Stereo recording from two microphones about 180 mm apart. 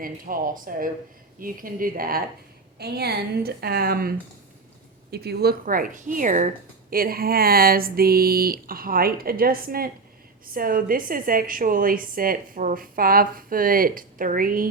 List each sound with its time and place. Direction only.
0.0 s a woman's voice: 50° right (ahead or behind)
5.1 s a woman's voice: 60° right (ahead or behind); by 6.5 s 45° right (ahead or behind)
6.9 s a woman's voice: 55° right (ahead or behind)